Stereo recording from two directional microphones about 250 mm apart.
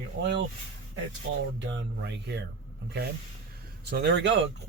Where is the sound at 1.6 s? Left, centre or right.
Right.